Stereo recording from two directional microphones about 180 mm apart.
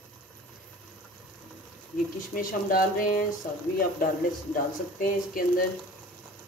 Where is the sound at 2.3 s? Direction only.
50° left (ahead or behind).